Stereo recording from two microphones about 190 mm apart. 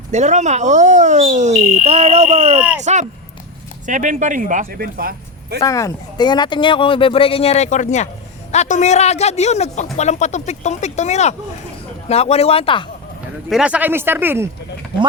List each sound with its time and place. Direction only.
0.1 s speech: 40° right (ahead or behind)
5.6 s speech: 15° left (ahead or behind)
13.5 s speech: 5° right (ahead or behind)